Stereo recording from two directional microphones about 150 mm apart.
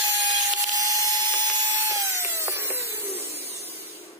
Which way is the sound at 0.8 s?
25° right (ahead or behind).